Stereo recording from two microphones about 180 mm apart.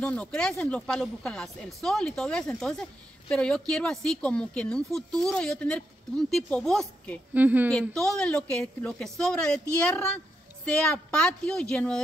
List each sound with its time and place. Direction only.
0.0 s speech: 5° left (ahead or behind)
7.3 s speech: 10° right (ahead or behind)
7.9 s speech: 5° left (ahead or behind)